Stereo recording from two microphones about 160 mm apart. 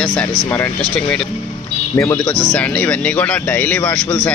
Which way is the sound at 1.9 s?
15° left (ahead or behind).